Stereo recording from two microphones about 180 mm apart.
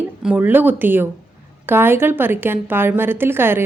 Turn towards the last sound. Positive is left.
turn(degrees=-10)  # may be behind; listen again after turning